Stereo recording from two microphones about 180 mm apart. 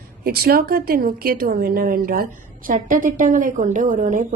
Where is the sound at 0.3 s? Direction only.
55° right (ahead or behind).